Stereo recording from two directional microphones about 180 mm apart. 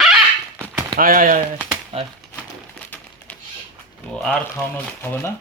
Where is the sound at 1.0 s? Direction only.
50° right (ahead or behind).